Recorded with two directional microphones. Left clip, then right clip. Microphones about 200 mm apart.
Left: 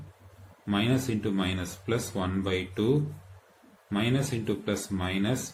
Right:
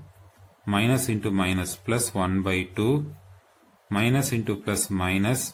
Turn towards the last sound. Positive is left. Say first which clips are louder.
# right 5 dB
turn(degrees=-45)  # may be behind; listen again after turning